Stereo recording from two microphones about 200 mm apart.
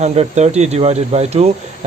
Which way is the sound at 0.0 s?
35° right (ahead or behind).